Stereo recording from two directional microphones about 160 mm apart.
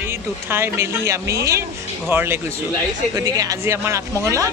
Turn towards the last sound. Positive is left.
turn(degrees=-20)  # may be behind; listen again after turning